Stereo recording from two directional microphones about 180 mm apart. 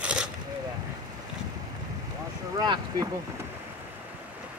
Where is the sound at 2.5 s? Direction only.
20° right (ahead or behind).